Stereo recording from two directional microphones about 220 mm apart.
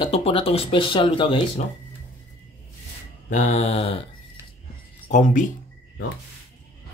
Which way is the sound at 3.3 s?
35° left (ahead or behind).